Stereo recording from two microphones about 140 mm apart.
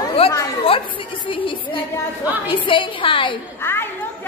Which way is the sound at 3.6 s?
15° left (ahead or behind).